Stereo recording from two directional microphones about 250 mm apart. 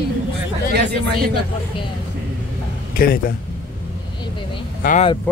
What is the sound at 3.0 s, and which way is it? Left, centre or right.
Speech, left.